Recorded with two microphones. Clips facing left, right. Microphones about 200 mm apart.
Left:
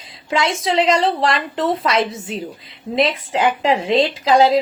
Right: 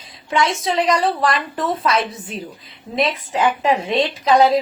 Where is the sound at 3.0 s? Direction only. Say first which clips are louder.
Left 1 dB; 30° left (ahead or behind).